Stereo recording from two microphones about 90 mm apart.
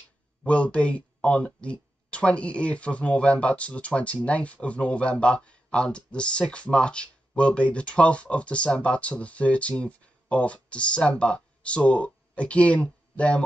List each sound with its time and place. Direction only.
0.4 s speech: 15° left (ahead or behind)